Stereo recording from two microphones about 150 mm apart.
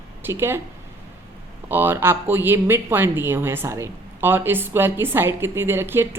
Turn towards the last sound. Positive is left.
turn(degrees=-15)  # may be behind; listen again after turning